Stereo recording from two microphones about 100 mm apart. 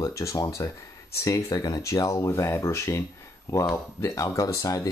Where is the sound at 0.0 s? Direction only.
30° left (ahead or behind).